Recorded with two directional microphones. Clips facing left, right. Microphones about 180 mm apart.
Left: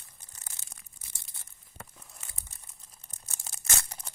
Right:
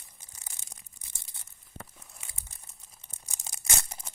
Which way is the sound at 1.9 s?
Centre (ahead or behind).